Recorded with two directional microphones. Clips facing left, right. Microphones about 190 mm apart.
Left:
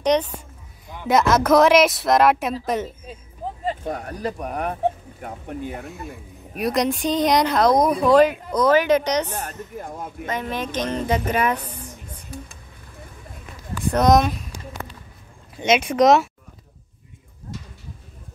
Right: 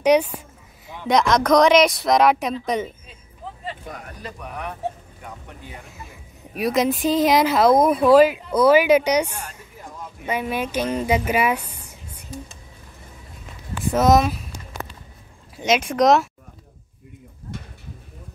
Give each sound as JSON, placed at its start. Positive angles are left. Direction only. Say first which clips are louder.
{"t": 0.0, "sound": "speech", "louder": "right 3 dB", "side_deg": -10}
{"t": 0.8, "sound": "speech", "louder": "left 1 dB", "side_deg": 5}
{"t": 3.6, "sound": "speech", "louder": "left 9 dB", "side_deg": 35}
{"t": 6.0, "sound": "a woman's voice", "louder": "left 7 dB", "side_deg": 0}
{"t": 9.8, "sound": "a sound", "louder": "left 5 dB", "side_deg": 50}
{"t": 10.2, "sound": "a woman's voice", "louder": "right 3 dB", "side_deg": -10}
{"t": 13.9, "sound": "speech", "louder": "even", "side_deg": -5}
{"t": 15.5, "sound": "speech", "louder": "left 1 dB", "side_deg": 0}